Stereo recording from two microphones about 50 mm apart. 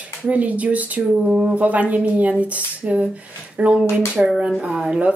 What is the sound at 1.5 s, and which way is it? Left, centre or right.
Speech, right.